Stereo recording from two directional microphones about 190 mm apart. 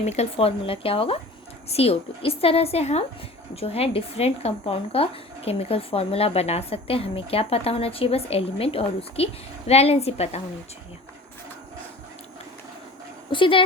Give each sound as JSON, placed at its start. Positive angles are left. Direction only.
{"t": 0.0, "sound": "speech", "side_deg": 35}
{"t": 13.3, "sound": "speech", "side_deg": 25}